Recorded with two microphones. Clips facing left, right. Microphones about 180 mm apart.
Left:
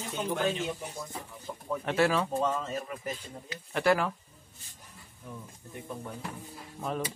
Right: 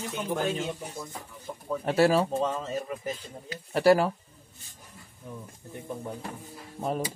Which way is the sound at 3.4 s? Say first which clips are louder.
Right 6 dB; 35° right (ahead or behind).